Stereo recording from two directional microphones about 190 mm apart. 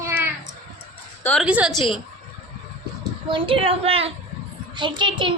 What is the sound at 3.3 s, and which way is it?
A child's voice, 25° right (ahead or behind).